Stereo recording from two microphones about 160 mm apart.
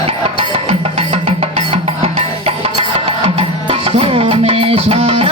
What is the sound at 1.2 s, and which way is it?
Music, 40° right (ahead or behind).